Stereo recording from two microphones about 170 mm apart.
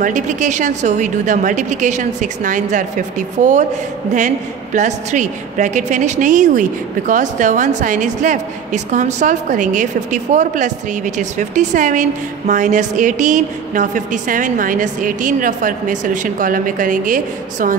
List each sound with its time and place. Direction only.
0.0 s a woman's voice: 45° right (ahead or behind)
4.7 s a woman's voice: 45° right (ahead or behind)